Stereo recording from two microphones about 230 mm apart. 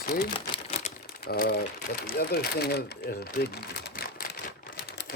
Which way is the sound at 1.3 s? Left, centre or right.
Left.